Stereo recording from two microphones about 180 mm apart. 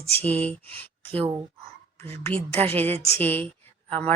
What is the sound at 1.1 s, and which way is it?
Speech, 30° right (ahead or behind).